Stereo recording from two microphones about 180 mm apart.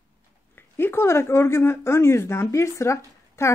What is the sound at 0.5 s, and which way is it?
Speech, 10° left (ahead or behind).